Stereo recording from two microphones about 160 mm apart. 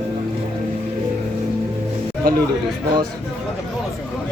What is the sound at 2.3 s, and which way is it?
Speech, 65° right (ahead or behind).